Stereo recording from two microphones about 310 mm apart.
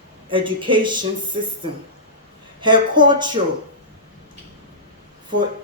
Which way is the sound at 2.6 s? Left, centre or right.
Centre.